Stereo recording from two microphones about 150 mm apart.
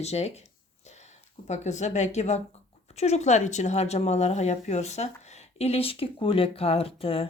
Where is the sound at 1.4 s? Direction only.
50° left (ahead or behind).